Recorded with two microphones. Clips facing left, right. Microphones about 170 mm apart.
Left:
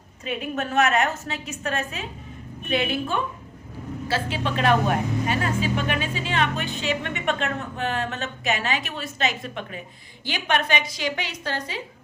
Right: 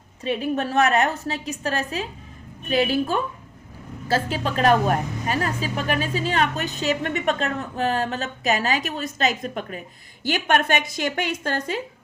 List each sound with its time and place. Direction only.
0.3 s a woman's voice: 35° right (ahead or behind); by 11.8 s 50° right (ahead or behind)